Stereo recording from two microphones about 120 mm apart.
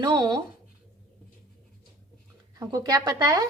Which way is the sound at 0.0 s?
35° right (ahead or behind).